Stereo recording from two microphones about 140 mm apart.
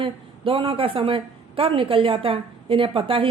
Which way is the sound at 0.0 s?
40° right (ahead or behind).